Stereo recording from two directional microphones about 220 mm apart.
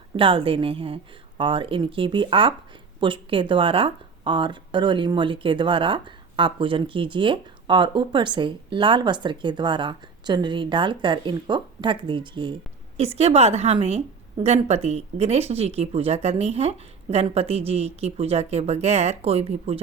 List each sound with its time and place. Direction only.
0.2 s speech: 25° right (ahead or behind)